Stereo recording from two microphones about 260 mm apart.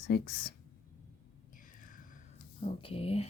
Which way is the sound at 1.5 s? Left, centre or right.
Left.